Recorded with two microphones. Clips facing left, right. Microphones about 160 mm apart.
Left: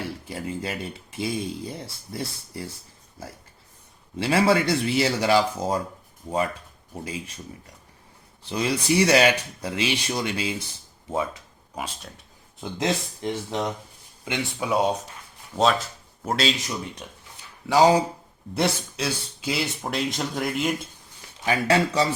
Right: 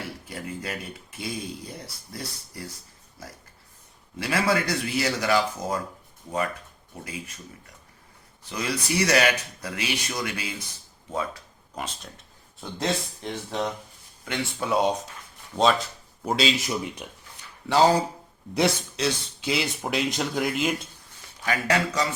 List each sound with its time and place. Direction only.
0.3 s speech: 25° left (ahead or behind)
4.2 s speech: 30° left (ahead or behind)
7.0 s speech: 30° left (ahead or behind)
8.4 s speech: 25° left (ahead or behind)
11.1 s a sound: 20° left (ahead or behind)
12.5 s speech: 20° left (ahead or behind)
14.7 s speech: 10° left (ahead or behind)
16.2 s speech: centre (ahead or behind)
17.7 s speech: 10° left (ahead or behind)
21.4 s speech: 30° left (ahead or behind)